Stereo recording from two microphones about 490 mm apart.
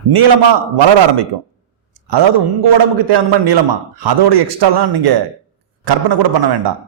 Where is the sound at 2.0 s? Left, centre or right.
Right.